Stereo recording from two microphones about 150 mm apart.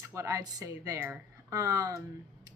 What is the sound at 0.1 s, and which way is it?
A woman's voice, 20° right (ahead or behind).